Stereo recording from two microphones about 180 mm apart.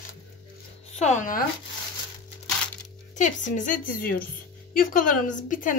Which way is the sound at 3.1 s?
45° left (ahead or behind).